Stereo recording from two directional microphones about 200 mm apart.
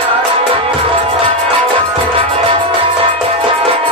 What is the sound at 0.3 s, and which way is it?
Music, 25° right (ahead or behind).